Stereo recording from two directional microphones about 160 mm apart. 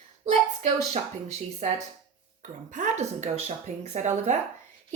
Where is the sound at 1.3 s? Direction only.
45° right (ahead or behind).